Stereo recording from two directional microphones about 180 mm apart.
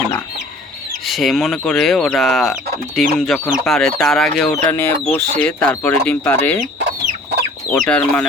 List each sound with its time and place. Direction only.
1.0 s speech: centre (ahead or behind)
4.7 s speech: 15° left (ahead or behind)
6.7 s chicken: 70° right (ahead or behind)
7.7 s speech: 5° left (ahead or behind)